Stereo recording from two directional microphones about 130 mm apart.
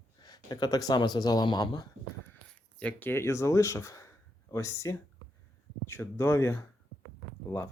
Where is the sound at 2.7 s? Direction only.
10° left (ahead or behind).